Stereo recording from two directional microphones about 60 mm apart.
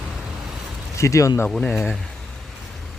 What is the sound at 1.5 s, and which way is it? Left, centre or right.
Speech, centre.